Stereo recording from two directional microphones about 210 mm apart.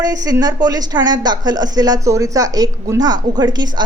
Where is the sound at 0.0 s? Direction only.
15° right (ahead or behind).